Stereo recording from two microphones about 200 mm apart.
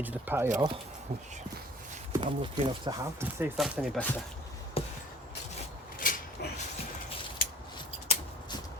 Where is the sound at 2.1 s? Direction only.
25° right (ahead or behind).